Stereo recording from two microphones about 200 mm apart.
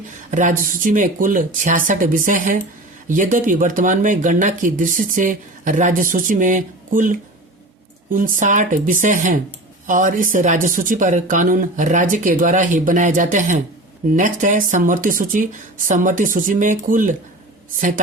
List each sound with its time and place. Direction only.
0.3 s speech: 40° right (ahead or behind)